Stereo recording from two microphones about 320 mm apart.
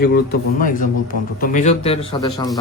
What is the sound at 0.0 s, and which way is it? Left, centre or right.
Speech, left.